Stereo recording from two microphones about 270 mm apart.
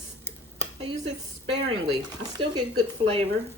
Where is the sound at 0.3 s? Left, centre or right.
Right.